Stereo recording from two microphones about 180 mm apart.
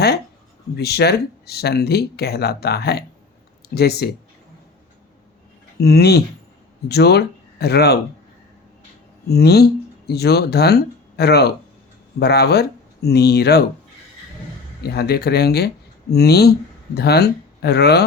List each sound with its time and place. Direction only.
0.8 s speech: 65° left (ahead or behind)
5.8 s speech: 65° left (ahead or behind)
9.3 s speech: 65° left (ahead or behind)
14.8 s speech: 60° left (ahead or behind)